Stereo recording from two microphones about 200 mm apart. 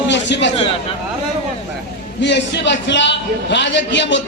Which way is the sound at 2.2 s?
60° left (ahead or behind).